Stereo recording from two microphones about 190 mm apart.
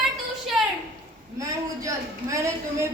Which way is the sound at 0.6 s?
Centre (ahead or behind).